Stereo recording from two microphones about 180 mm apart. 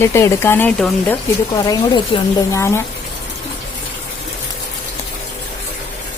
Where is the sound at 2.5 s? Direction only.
15° left (ahead or behind).